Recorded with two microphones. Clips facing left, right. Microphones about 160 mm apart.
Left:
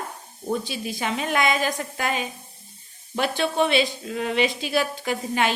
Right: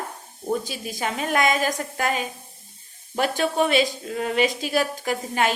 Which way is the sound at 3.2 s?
45° right (ahead or behind).